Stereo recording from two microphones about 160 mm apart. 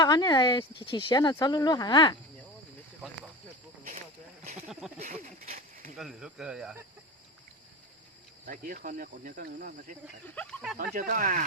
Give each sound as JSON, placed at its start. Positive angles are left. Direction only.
{"t": 0.0, "sound": "speech", "side_deg": 25}
{"t": 4.9, "sound": "a sound", "side_deg": -45}
{"t": 6.0, "sound": "speech", "side_deg": -5}
{"t": 8.4, "sound": "speech", "side_deg": -60}
{"t": 10.2, "sound": "speech", "side_deg": 10}
{"t": 10.8, "sound": "speech", "side_deg": -65}